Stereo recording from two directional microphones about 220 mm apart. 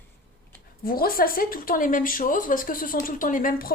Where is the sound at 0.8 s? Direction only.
40° left (ahead or behind).